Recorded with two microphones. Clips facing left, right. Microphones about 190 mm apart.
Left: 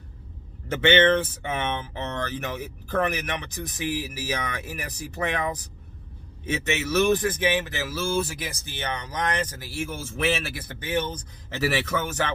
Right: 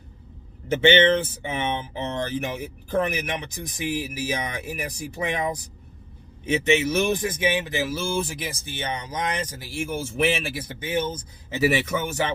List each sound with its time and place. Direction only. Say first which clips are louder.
0.9 s speech: right 1 dB; 10° right (ahead or behind)